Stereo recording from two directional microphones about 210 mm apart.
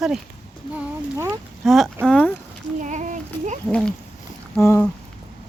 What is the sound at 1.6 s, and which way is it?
Speech, centre (ahead or behind).